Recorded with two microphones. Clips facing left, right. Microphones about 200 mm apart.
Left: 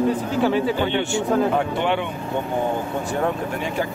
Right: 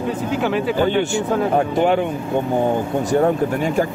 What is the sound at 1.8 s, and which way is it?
Speech, 40° right (ahead or behind).